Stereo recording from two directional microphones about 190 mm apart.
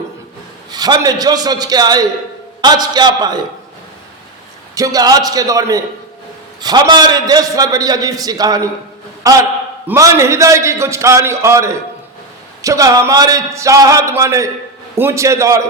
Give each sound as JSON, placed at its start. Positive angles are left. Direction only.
{"t": 0.7, "sound": "a man's voice", "side_deg": -20}
{"t": 4.7, "sound": "a man's voice", "side_deg": -20}